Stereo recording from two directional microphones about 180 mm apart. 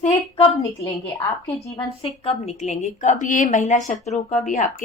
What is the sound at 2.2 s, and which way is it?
A woman's voice, 40° left (ahead or behind).